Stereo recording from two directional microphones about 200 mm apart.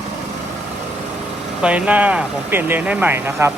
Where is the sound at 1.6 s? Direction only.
5° right (ahead or behind).